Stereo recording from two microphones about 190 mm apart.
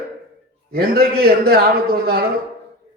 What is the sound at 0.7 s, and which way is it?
A man's voice, 55° right (ahead or behind).